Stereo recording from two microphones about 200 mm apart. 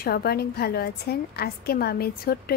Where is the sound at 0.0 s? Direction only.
50° left (ahead or behind).